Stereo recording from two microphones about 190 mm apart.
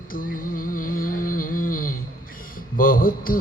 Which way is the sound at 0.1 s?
45° left (ahead or behind).